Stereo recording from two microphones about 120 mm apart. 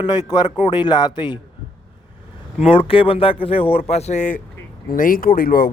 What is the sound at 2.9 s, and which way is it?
Speech, 50° left (ahead or behind).